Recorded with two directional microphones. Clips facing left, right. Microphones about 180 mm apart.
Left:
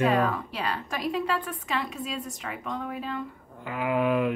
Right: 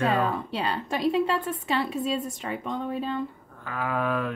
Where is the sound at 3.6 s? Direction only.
15° left (ahead or behind).